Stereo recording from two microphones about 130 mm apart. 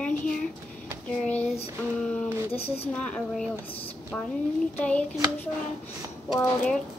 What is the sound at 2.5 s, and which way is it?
Speech, 50° left (ahead or behind).